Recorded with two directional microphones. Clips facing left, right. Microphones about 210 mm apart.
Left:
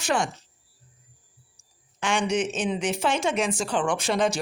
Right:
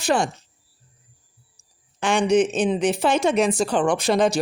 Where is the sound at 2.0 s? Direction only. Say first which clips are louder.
Right 7 dB; 35° right (ahead or behind).